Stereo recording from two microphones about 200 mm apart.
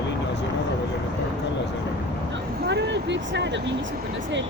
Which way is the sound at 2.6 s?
60° right (ahead or behind).